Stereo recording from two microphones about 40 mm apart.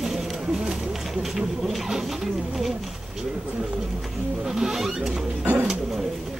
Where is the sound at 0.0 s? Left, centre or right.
Centre.